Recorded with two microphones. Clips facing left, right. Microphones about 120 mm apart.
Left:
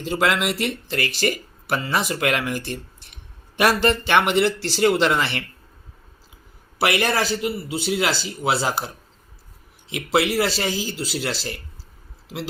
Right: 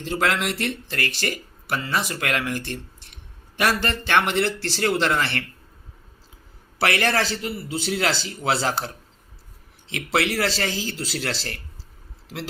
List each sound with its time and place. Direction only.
0.0 s a man's voice: 15° left (ahead or behind)
6.7 s a man's voice: 15° left (ahead or behind)
9.9 s a man's voice: 10° left (ahead or behind)